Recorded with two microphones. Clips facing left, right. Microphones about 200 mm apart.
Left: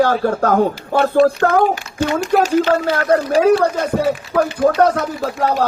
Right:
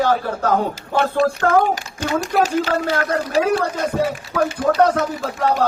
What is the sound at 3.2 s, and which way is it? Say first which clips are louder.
Speech: left 6 dB; 40° left (ahead or behind).